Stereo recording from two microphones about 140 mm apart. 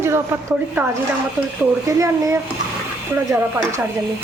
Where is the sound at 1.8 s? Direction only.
25° right (ahead or behind).